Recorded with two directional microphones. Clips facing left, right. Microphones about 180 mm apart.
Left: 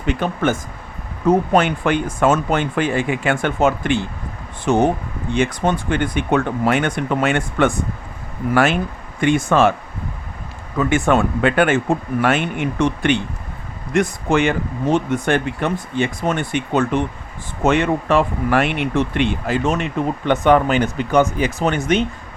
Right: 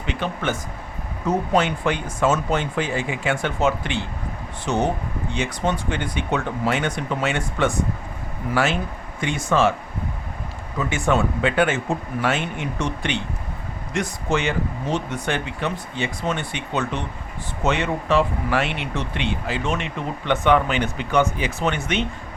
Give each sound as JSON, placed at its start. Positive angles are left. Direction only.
{"t": 0.0, "sound": "speech", "side_deg": 45}
{"t": 10.8, "sound": "speech", "side_deg": 55}